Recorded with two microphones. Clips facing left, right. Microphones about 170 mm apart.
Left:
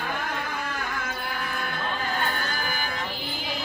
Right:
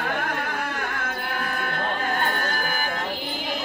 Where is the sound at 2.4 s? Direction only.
50° right (ahead or behind).